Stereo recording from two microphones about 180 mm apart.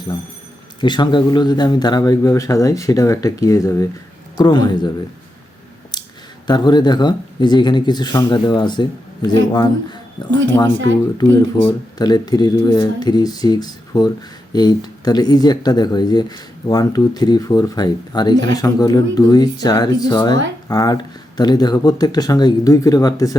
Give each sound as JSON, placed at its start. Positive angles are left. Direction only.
{"t": 0.8, "sound": "speech", "side_deg": 25}
{"t": 5.9, "sound": "a sound", "side_deg": 25}
{"t": 6.5, "sound": "speech", "side_deg": 25}
{"t": 11.2, "sound": "speech", "side_deg": 20}